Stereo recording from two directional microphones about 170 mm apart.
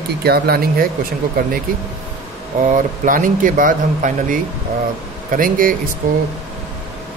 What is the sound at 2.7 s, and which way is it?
Speech, 50° right (ahead or behind).